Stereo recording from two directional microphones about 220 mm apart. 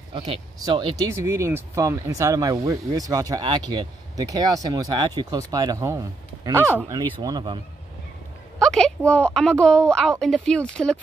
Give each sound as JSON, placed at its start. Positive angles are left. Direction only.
{"t": 0.1, "sound": "speech", "side_deg": -20}
{"t": 8.5, "sound": "a woman's voice", "side_deg": 0}